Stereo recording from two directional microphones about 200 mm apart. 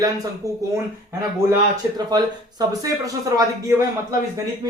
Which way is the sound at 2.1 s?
20° right (ahead or behind).